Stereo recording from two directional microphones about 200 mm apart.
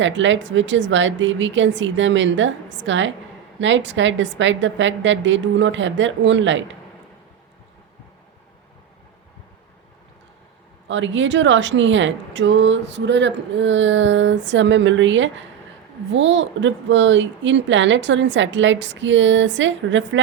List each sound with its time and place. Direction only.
0.0 s speech: 70° right (ahead or behind)
10.8 s speech: 70° right (ahead or behind)